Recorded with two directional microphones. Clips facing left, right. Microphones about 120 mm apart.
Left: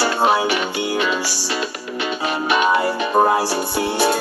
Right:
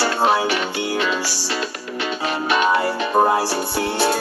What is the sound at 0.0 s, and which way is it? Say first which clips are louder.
Music: left 1 dB; 15° left (ahead or behind).